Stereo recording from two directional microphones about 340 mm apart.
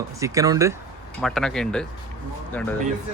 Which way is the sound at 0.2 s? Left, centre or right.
Centre.